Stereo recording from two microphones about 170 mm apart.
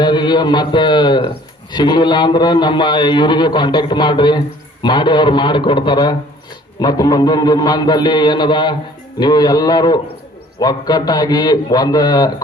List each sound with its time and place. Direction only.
0.0 s a man's voice: 25° left (ahead or behind)